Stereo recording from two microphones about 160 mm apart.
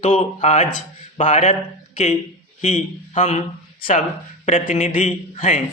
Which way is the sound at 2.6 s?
50° left (ahead or behind).